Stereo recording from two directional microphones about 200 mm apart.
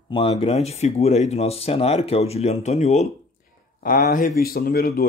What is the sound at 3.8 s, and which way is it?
Speech, 45° left (ahead or behind).